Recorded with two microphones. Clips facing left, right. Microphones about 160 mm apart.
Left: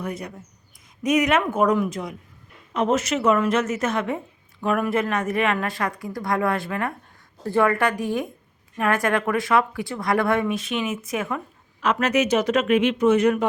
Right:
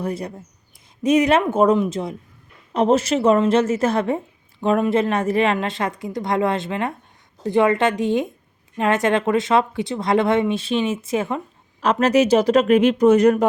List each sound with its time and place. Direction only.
0.0 s a woman's voice: 30° right (ahead or behind)